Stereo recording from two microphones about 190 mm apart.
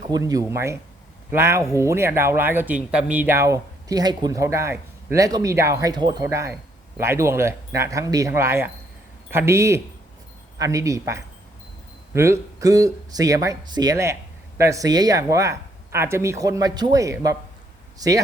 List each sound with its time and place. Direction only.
0.1 s speech: 20° right (ahead or behind)